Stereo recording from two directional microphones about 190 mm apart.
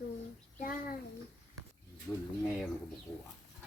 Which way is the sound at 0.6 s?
45° left (ahead or behind).